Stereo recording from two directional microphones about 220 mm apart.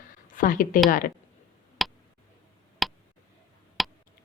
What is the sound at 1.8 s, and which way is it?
Tick, centre (ahead or behind).